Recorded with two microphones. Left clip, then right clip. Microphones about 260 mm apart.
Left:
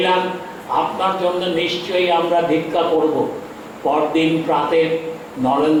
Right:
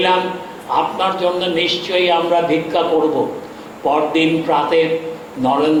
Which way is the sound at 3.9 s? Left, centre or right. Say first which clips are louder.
Right 2 dB; centre.